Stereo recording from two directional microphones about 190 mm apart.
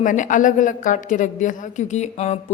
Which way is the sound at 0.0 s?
40° left (ahead or behind).